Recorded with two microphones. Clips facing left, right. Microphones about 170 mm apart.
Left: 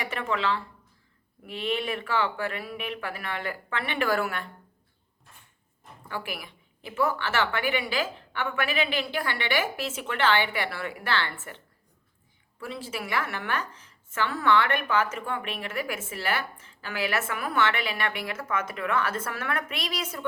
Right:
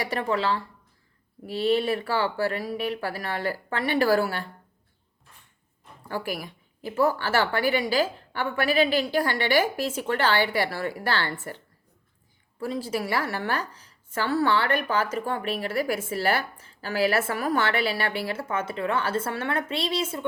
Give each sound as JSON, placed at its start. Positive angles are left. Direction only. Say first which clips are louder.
{"t": 0.0, "sound": "a woman's voice", "louder": "right 3 dB", "side_deg": -35}
{"t": 6.1, "sound": "a woman's voice", "louder": "right 5 dB", "side_deg": -40}
{"t": 12.5, "sound": "a woman's voice", "louder": "right 7 dB", "side_deg": -40}